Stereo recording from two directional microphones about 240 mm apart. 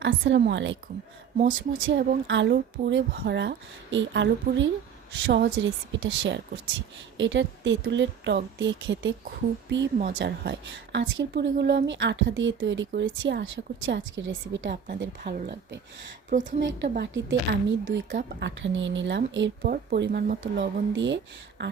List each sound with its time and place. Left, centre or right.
0.0 s speech: right
1.4 s speech: right
1.9 s speech: right
16.6 s speech: right
19.6 s speech: right